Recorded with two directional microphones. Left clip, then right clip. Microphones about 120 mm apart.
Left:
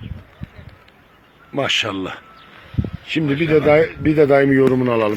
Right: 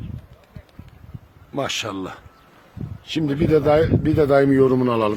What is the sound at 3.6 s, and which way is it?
Speech, 20° right (ahead or behind).